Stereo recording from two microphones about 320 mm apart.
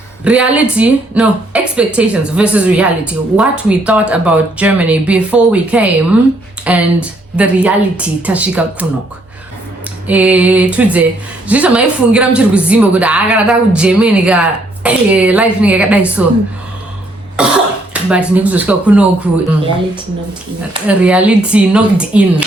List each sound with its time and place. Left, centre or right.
0.3 s a woman's voice: centre
10.1 s a woman's voice: centre
17.4 s cough: centre
17.9 s a woman's voice: centre
20.8 s a woman's voice: centre